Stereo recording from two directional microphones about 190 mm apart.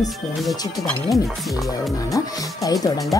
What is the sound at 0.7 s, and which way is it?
Speech, centre (ahead or behind).